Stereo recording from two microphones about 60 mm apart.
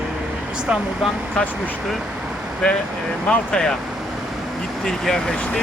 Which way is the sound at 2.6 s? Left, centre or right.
Centre.